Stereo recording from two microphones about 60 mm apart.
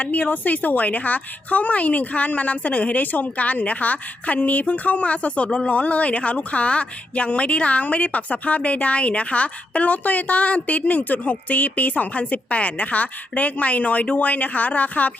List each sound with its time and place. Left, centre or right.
0.0 s speech: left